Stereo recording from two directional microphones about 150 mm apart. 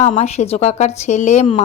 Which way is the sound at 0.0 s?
50° left (ahead or behind).